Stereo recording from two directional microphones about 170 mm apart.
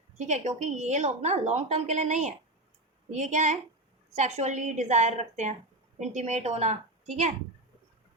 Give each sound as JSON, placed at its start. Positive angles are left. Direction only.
{"t": 0.2, "sound": "a woman's voice", "side_deg": -45}